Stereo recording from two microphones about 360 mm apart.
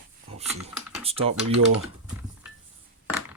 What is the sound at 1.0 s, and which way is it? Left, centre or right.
Typing, centre.